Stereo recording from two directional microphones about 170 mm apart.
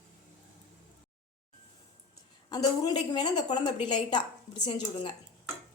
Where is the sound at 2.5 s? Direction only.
25° left (ahead or behind).